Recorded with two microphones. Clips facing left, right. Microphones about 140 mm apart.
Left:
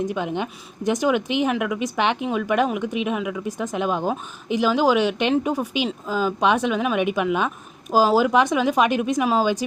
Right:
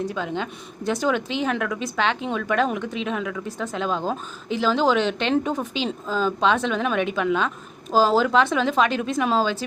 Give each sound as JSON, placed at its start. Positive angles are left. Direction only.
{"t": 0.0, "sound": "speech", "side_deg": 15}